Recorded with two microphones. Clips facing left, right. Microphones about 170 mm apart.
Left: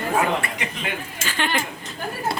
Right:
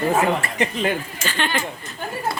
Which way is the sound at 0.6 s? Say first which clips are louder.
Right 8 dB; 35° right (ahead or behind).